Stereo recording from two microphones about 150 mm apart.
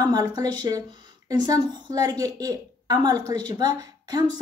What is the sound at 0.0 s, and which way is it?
A woman's voice, 25° right (ahead or behind).